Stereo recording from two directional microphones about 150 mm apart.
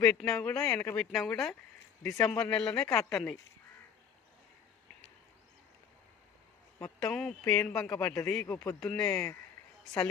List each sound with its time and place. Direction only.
0.0 s speech: 5° left (ahead or behind)
0.7 s speech: 20° left (ahead or behind)
0.9 s speech: centre (ahead or behind)
7.0 s a man's voice: 5° left (ahead or behind)